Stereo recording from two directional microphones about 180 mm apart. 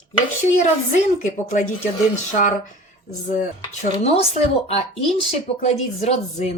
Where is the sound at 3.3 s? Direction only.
45° left (ahead or behind).